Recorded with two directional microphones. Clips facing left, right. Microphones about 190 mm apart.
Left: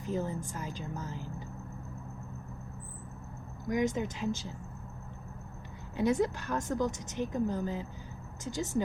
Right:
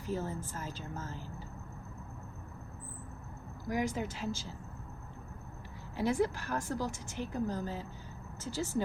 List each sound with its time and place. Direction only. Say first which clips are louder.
0.0 s a woman's voice: left 3 dB; 15° left (ahead or behind)
3.7 s a woman's voice: left 4 dB; 20° left (ahead or behind)
6.0 s a woman's voice: left 2 dB; 20° left (ahead or behind)